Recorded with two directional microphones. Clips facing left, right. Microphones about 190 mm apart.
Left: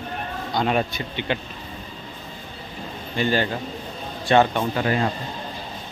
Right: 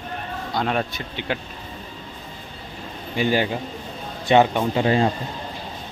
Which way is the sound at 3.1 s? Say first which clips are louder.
Right 1 dB; 10° right (ahead or behind).